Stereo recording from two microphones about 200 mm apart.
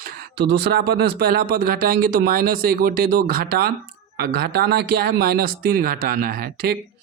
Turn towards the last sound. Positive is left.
turn(degrees=-50)  # may be behind; listen again after turning